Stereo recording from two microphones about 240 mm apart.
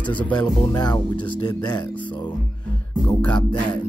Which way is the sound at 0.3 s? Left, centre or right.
Centre.